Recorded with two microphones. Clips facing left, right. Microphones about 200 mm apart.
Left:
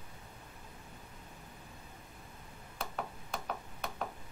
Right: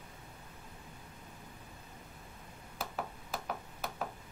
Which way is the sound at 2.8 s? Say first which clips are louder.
Even; 5° right (ahead or behind).